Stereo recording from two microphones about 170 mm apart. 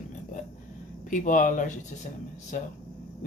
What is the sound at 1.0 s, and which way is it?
Speech, 50° left (ahead or behind).